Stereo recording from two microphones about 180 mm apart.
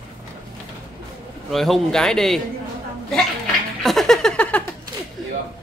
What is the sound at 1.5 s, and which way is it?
Speech, centre (ahead or behind).